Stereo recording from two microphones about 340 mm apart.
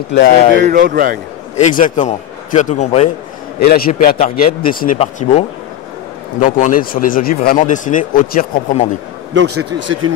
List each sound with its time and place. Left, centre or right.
0.1 s speech: left
0.6 s speech: right
1.6 s speech: left
6.4 s speech: left
9.3 s speech: right